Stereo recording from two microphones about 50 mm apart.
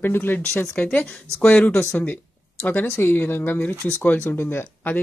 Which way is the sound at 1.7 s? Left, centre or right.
Left.